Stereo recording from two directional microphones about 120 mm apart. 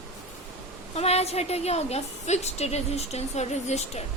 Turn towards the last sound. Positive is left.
turn(degrees=65)  # may be behind; listen again after turning